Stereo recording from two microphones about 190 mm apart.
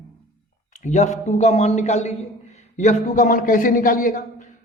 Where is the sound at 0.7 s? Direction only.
40° left (ahead or behind).